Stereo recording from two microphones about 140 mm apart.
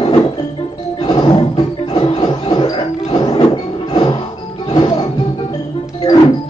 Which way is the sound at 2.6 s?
35° left (ahead or behind).